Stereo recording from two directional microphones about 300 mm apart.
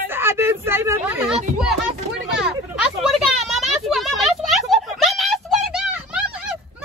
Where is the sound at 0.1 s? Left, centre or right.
Centre.